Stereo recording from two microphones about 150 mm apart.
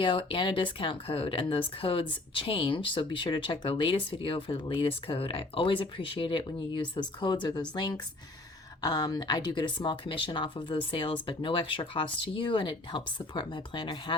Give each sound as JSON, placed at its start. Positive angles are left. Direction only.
{"t": 0.0, "sound": "speech", "side_deg": 35}